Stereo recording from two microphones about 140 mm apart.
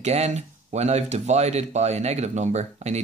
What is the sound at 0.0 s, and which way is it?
Speech, 50° right (ahead or behind).